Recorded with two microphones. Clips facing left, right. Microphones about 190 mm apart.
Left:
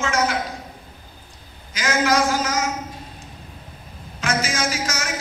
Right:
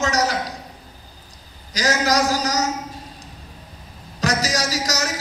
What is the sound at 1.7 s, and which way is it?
Speech, 35° right (ahead or behind).